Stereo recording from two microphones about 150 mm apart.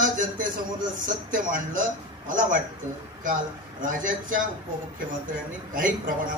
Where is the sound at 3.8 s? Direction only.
65° right (ahead or behind).